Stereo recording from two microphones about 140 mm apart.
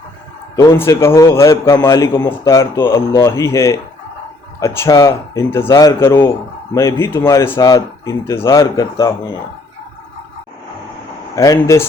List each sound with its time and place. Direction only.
0.5 s a man's voice: 25° left (ahead or behind)
11.3 s a man's voice: 25° left (ahead or behind)